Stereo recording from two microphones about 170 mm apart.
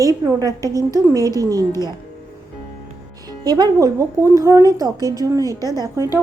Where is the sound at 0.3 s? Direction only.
20° right (ahead or behind).